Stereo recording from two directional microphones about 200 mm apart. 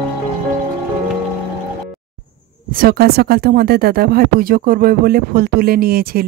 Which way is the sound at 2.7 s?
50° right (ahead or behind).